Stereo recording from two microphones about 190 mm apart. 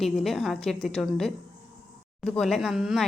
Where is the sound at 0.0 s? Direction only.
Centre (ahead or behind).